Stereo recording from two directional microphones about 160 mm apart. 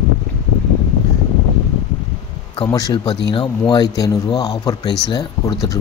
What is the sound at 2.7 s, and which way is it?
Speech, 20° left (ahead or behind).